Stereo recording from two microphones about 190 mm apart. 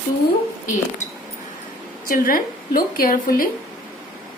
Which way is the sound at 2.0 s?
50° left (ahead or behind).